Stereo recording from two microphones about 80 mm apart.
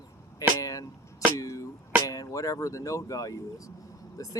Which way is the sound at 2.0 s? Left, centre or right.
Left.